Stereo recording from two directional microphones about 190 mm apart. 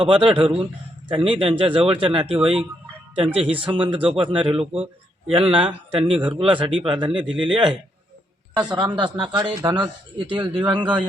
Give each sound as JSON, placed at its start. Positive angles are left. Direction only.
{"t": 0.0, "sound": "speech", "side_deg": -25}
{"t": 8.6, "sound": "speech", "side_deg": -25}
{"t": 10.5, "sound": "speech", "side_deg": -5}